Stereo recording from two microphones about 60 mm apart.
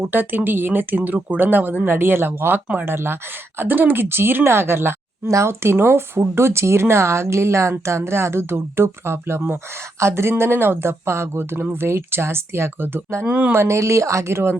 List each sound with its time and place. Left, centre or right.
0.0 s speech: right
13.2 s speech: right
13.5 s speech: right